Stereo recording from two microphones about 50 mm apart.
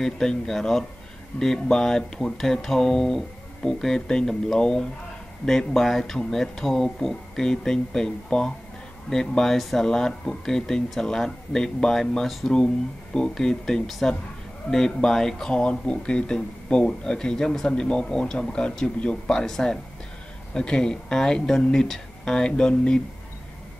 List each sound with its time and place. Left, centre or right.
0.0 s speech: centre